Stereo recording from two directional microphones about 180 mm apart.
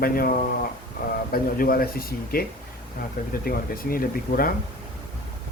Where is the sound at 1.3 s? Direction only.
55° left (ahead or behind).